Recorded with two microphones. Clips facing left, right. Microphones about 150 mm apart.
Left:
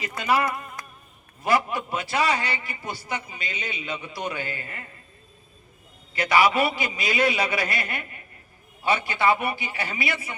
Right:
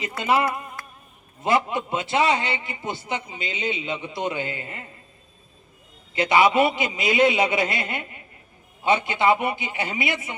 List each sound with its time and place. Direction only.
0.2 s a man's voice: 25° right (ahead or behind)
6.1 s a man's voice: 20° right (ahead or behind)